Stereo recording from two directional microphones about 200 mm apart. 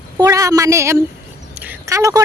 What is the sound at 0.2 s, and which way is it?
Speech, 15° right (ahead or behind).